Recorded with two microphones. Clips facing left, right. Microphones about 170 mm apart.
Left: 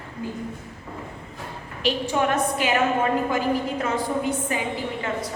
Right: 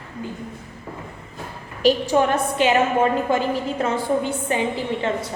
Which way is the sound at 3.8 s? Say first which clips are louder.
Right 3 dB; 30° right (ahead or behind).